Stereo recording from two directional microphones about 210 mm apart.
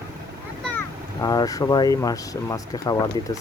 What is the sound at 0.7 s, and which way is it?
Speech, 15° left (ahead or behind).